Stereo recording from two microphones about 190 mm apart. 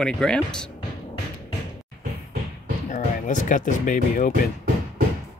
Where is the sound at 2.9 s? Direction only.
40° left (ahead or behind).